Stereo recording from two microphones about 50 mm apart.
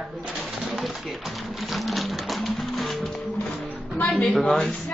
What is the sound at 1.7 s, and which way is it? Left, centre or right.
Music, centre.